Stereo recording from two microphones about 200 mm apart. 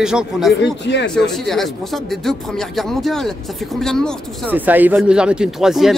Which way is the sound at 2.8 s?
Centre (ahead or behind).